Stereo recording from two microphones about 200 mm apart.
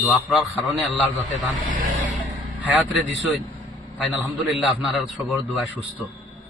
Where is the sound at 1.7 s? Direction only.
40° right (ahead or behind).